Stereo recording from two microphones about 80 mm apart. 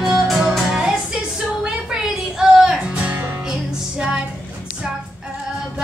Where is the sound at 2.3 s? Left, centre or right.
Centre.